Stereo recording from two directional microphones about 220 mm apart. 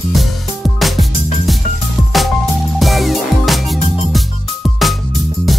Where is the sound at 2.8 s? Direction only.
Centre (ahead or behind).